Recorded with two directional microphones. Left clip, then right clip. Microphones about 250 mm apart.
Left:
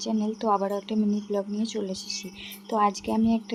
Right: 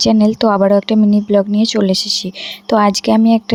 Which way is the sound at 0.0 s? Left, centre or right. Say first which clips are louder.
Right 16 dB; right.